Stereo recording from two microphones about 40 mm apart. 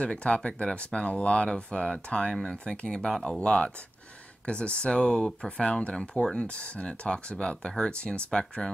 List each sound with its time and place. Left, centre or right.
0.0 s speech: left
3.0 s speech: centre
3.4 s speech: left